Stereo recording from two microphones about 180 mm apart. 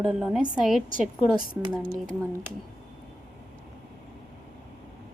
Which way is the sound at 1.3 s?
25° right (ahead or behind).